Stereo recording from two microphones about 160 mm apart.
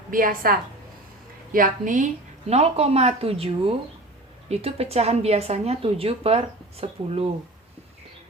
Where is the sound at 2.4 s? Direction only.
40° right (ahead or behind).